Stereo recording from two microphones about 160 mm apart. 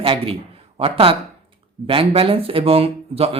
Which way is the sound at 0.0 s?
35° right (ahead or behind).